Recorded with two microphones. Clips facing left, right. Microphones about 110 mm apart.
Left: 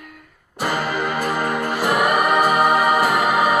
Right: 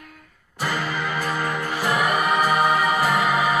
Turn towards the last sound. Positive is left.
turn(degrees=50)  # may be behind; listen again after turning